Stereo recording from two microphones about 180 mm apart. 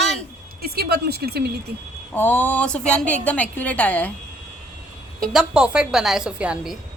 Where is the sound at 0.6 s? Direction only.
60° right (ahead or behind).